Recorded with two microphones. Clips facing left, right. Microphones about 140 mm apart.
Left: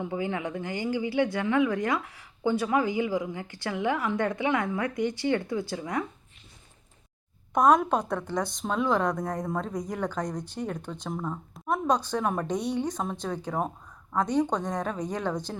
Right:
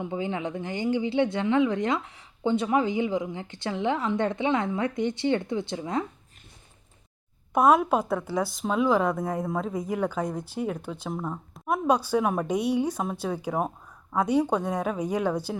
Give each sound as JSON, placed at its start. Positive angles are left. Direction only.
{"t": 0.0, "sound": "speech", "side_deg": -20}
{"t": 7.5, "sound": "speech", "side_deg": -5}